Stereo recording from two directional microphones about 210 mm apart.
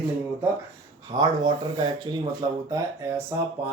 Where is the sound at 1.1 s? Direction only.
20° right (ahead or behind).